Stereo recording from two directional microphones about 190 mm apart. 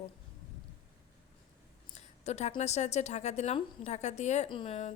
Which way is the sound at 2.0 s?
35° left (ahead or behind).